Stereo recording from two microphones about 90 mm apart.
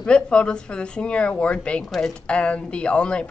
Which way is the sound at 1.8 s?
Centre (ahead or behind).